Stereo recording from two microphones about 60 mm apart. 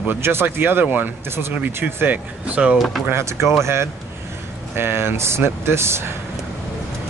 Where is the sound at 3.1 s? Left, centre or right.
Right.